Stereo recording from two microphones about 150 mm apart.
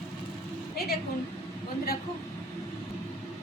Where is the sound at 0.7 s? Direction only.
90° left.